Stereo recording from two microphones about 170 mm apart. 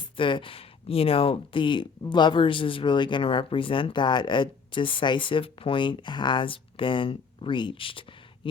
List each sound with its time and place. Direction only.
0.2 s speech: 30° left (ahead or behind)